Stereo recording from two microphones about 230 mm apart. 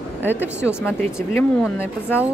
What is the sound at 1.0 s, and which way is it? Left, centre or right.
Speech, centre.